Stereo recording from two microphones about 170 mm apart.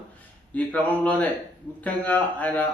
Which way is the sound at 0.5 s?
10° left (ahead or behind).